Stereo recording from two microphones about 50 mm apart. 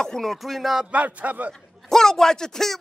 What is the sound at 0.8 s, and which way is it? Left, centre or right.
Speech, right.